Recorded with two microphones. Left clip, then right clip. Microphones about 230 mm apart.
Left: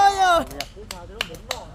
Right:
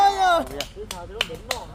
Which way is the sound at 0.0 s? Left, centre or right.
Left.